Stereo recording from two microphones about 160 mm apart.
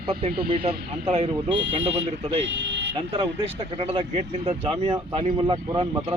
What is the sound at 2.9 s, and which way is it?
Speech, 30° right (ahead or behind).